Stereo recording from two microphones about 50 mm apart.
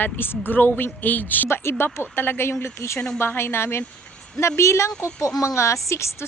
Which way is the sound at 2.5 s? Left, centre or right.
Left.